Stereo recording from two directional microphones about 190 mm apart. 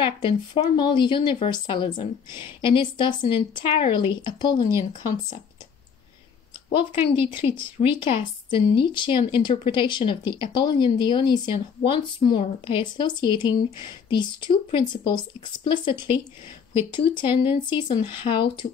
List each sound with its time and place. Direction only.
0.0 s speech: 25° left (ahead or behind)
7.2 s speech: 25° left (ahead or behind)